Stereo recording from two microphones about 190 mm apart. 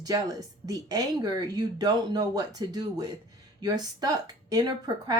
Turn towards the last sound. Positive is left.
turn(degrees=-20)  # may be behind; listen again after turning